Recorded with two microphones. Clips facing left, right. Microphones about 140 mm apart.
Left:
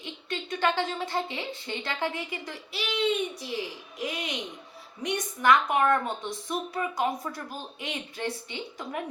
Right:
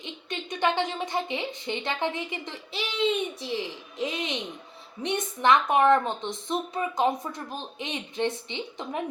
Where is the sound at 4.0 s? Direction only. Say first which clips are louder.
Right 3 dB; 25° right (ahead or behind).